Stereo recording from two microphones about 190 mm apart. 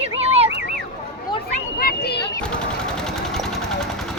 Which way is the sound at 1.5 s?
50° left (ahead or behind).